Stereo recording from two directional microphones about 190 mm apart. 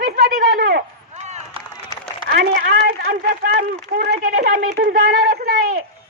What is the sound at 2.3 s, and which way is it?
Speech, 55° right (ahead or behind).